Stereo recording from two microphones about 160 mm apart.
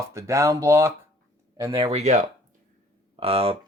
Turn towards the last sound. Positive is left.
turn(degrees=-35)  # may be behind; listen again after turning